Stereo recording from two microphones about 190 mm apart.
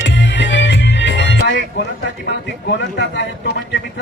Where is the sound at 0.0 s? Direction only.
70° left (ahead or behind).